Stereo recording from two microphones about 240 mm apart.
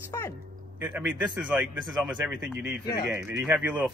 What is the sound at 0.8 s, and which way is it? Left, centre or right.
A man's voice, centre.